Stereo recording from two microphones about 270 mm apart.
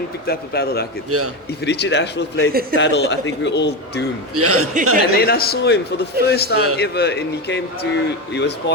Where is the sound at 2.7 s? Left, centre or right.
Left.